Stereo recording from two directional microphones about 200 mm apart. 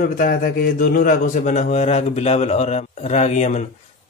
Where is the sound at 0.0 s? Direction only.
45° left (ahead or behind).